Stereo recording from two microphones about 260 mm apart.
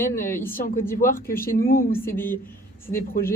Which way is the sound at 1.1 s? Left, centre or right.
Left.